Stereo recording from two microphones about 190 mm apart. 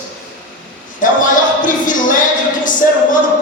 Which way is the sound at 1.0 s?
45° left (ahead or behind).